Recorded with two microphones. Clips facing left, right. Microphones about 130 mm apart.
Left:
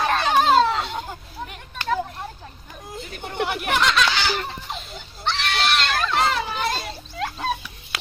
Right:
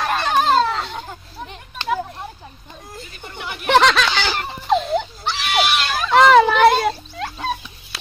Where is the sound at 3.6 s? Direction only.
90° right.